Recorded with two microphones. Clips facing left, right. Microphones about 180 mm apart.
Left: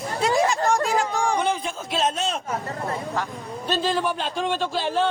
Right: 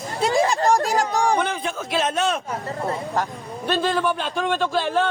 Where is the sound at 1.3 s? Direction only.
60° right (ahead or behind).